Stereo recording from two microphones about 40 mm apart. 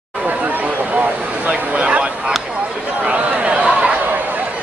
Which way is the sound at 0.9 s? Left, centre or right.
Right.